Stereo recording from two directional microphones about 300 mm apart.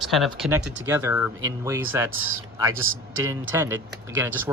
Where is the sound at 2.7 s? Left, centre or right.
Right.